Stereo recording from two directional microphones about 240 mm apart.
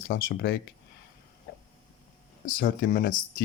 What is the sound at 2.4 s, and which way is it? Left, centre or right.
Speech, left.